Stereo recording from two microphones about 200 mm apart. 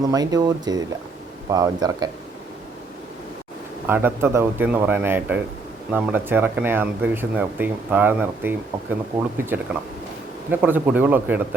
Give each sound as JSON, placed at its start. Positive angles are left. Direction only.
{"t": 0.1, "sound": "speech", "side_deg": -20}
{"t": 3.8, "sound": "speech", "side_deg": -10}